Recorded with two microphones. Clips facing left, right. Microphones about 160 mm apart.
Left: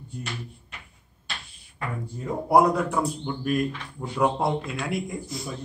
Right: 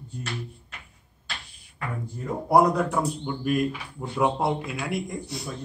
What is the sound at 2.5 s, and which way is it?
A man's voice, centre (ahead or behind).